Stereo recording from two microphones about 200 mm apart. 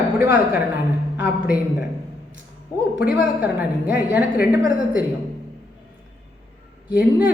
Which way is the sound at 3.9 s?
10° right (ahead or behind).